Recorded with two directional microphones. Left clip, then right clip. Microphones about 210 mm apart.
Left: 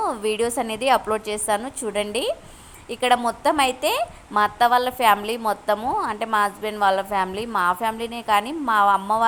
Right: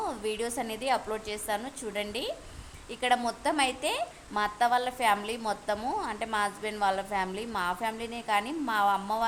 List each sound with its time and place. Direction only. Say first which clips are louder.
0.0 s a woman's voice: left 10 dB; 20° left (ahead or behind)